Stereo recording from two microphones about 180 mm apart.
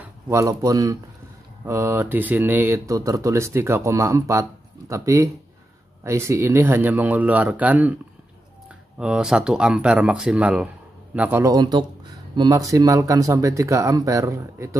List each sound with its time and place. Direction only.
0.0 s speech: 15° right (ahead or behind)
8.9 s speech: 5° right (ahead or behind)